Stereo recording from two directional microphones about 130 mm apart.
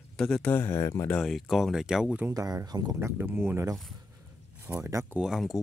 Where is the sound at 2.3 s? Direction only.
30° right (ahead or behind).